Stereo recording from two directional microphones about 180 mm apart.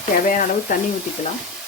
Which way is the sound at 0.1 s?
50° left (ahead or behind).